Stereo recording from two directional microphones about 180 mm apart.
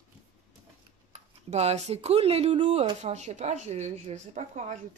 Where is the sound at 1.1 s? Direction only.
35° right (ahead or behind).